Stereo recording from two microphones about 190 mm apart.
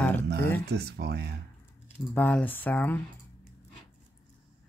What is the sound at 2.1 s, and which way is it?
Speech, 10° left (ahead or behind).